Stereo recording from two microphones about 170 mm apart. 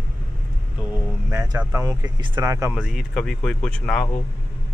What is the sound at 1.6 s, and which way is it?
Speech, 15° right (ahead or behind).